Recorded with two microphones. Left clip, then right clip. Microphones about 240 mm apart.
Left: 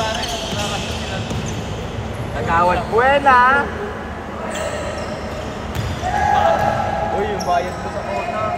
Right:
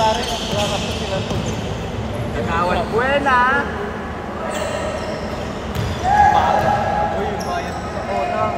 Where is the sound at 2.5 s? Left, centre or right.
Left.